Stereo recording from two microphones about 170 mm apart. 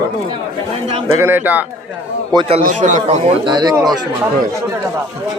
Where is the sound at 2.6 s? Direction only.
45° right (ahead or behind).